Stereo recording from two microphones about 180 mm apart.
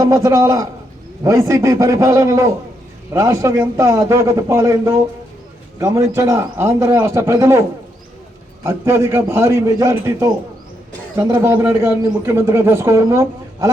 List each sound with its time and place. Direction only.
0.0 s a man's voice: 20° right (ahead or behind)
8.6 s a man's voice: 15° right (ahead or behind)